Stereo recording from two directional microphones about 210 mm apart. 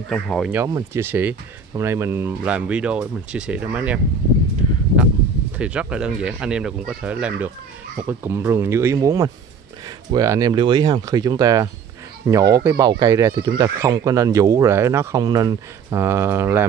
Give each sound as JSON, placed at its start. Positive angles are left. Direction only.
{"t": 0.1, "sound": "speech", "side_deg": 0}
{"t": 0.6, "sound": "speech", "side_deg": -15}
{"t": 5.6, "sound": "speech", "side_deg": -5}